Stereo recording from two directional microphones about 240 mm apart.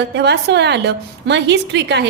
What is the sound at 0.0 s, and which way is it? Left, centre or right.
A woman's voice, right.